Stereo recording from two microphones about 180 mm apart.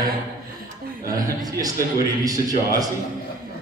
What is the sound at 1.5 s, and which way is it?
Speech, 20° right (ahead or behind).